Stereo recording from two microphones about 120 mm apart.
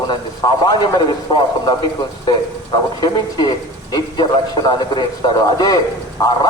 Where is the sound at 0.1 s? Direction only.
35° left (ahead or behind).